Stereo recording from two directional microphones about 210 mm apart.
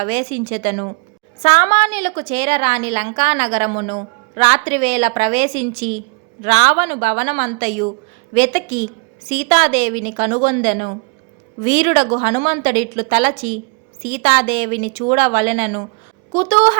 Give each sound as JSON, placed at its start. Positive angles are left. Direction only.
{"t": 0.0, "sound": "a woman's voice", "side_deg": -35}